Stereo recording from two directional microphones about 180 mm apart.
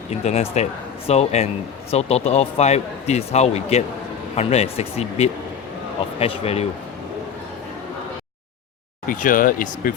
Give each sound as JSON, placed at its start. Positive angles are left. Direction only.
{"t": 0.1, "sound": "speech", "side_deg": 35}
{"t": 9.0, "sound": "speech", "side_deg": 50}